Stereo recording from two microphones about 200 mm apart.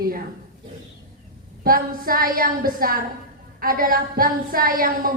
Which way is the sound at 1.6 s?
45° right (ahead or behind).